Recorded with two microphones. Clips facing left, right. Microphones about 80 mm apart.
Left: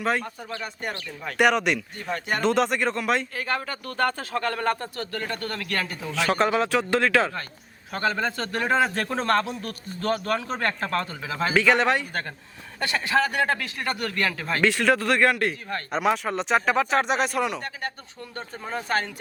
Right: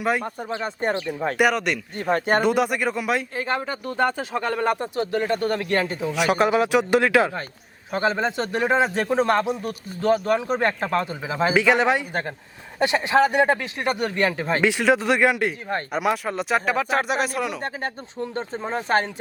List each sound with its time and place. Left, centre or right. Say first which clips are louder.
0.0 s speech: right 2 dB; centre
0.4 s speech: right 7 dB; right
1.4 s speech: left 1 dB; centre
2.0 s speech: right 8 dB; right
2.4 s speech: right 1 dB; centre
3.3 s speech: right 3 dB; right; by 17.6 s centre
17.6 s speech: right 4 dB; right